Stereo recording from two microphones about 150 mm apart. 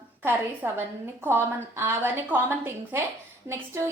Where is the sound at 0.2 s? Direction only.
15° right (ahead or behind).